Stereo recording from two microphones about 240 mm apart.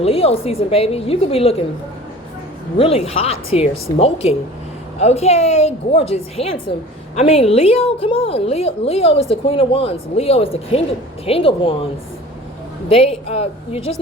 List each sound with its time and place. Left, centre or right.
0.0 s a woman's voice: left
2.7 s a woman's voice: left
12.9 s a woman's voice: left